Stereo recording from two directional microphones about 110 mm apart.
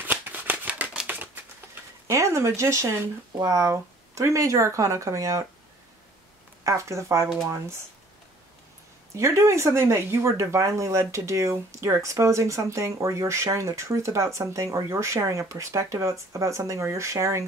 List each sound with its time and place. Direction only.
0.0 s shuffling cards: 15° right (ahead or behind)
2.0 s speech: 25° right (ahead or behind)
6.6 s speech: 30° right (ahead or behind)
9.1 s speech: 25° right (ahead or behind)